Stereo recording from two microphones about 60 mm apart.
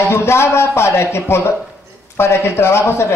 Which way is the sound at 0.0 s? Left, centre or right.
Left.